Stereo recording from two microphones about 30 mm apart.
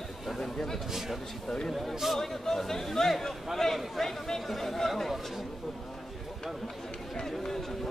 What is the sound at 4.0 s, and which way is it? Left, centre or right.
Chatter, centre.